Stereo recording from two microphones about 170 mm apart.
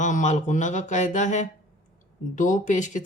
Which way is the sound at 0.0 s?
45° left (ahead or behind).